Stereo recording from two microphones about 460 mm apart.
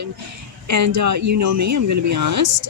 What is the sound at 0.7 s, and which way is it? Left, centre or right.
Speech, right.